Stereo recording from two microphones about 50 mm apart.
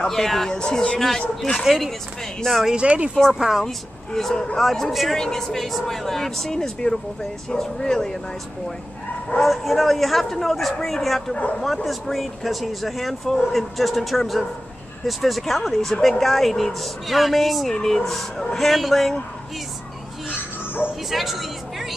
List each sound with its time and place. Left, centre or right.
0.0 s a woman's voice: centre
2.8 s speech: right
3.3 s speech: centre
3.6 s a woman's voice: centre
9.4 s speech: centre
11.3 s speech: left
11.6 s speech: centre
21.1 s a woman's voice: centre